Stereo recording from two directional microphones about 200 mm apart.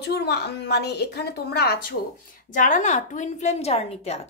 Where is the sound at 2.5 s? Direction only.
40° left (ahead or behind).